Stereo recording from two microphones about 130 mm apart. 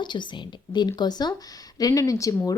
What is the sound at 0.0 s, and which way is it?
A woman's voice, 35° left (ahead or behind).